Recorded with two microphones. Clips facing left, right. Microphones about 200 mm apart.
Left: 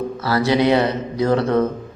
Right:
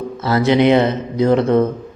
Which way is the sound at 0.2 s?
20° right (ahead or behind).